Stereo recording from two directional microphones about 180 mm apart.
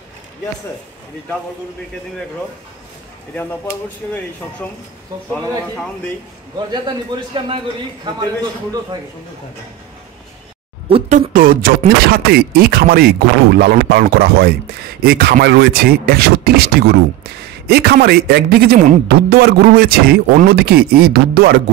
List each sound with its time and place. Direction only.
6.7 s a man's voice: 25° right (ahead or behind)
10.9 s speech: 30° right (ahead or behind)
11.1 s speech: 50° right (ahead or behind)
19.0 s speech: 60° right (ahead or behind)